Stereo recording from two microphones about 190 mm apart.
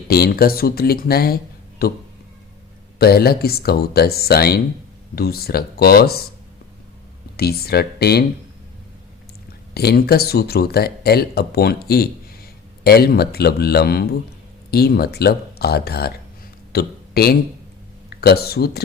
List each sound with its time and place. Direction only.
0.1 s speech: 50° left (ahead or behind)
3.0 s speech: 55° left (ahead or behind)
7.3 s speech: 55° left (ahead or behind)
9.7 s speech: 55° left (ahead or behind)
12.8 s speech: 55° left (ahead or behind)
16.7 s a sound: 55° left (ahead or behind)
18.1 s speech: 55° left (ahead or behind)